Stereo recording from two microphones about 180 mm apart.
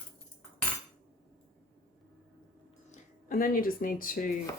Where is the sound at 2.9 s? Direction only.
50° left (ahead or behind).